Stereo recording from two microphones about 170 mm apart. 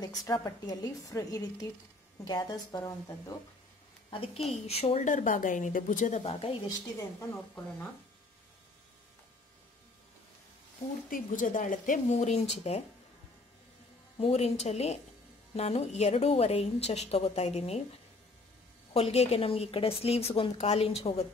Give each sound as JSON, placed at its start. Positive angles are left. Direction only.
{"t": 0.2, "sound": "a woman's voice", "side_deg": 25}
{"t": 4.1, "sound": "a woman's voice", "side_deg": 35}
{"t": 11.1, "sound": "a woman's voice", "side_deg": 55}
{"t": 14.1, "sound": "a woman's voice", "side_deg": 35}
{"t": 18.9, "sound": "a woman's voice", "side_deg": 35}